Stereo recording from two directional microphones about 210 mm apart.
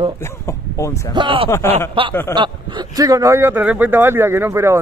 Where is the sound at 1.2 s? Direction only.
25° right (ahead or behind).